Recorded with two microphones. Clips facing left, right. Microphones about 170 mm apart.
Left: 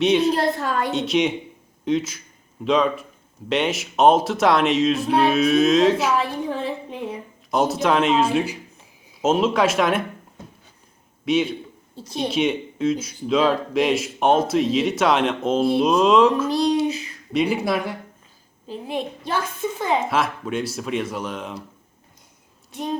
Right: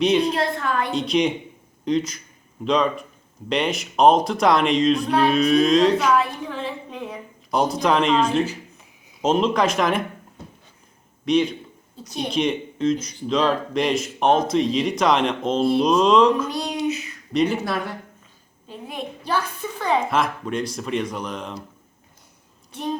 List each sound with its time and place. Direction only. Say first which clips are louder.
0.0 s speech: left 1 dB; centre (ahead or behind)
6.1 s a sound: even; 30° left (ahead or behind)
7.5 s speech: even; 5° left (ahead or behind)
11.3 s speech: right 1 dB; 5° left (ahead or behind)
16.5 s a sound: left 5 dB; 30° left (ahead or behind)
17.3 s speech: left 1 dB; 10° left (ahead or behind)
18.7 s a child's voice: left 5 dB; 25° left (ahead or behind)
20.1 s speech: even; 5° left (ahead or behind)